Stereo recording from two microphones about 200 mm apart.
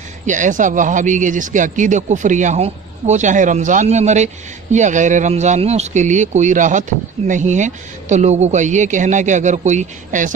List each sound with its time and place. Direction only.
0.3 s speech: 40° right (ahead or behind)